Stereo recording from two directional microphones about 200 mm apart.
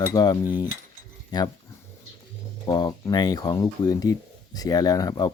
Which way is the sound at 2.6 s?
20° left (ahead or behind).